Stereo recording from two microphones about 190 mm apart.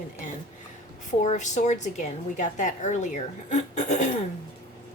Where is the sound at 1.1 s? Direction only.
40° left (ahead or behind).